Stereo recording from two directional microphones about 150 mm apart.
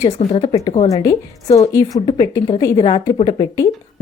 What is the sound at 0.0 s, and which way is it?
Speech, 45° left (ahead or behind).